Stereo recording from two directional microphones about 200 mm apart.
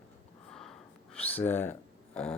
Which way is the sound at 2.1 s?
5° left (ahead or behind).